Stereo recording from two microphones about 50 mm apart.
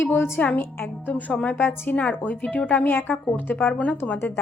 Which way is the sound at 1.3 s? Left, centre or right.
Left.